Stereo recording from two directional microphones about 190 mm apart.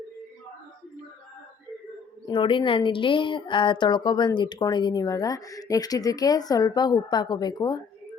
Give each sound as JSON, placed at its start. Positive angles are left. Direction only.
{"t": 2.2, "sound": "speech", "side_deg": 25}